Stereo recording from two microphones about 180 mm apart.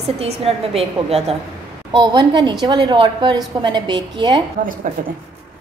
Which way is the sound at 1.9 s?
25° right (ahead or behind).